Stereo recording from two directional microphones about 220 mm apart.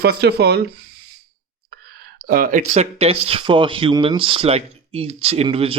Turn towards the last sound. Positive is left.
turn(degrees=-25)  # may be behind; listen again after turning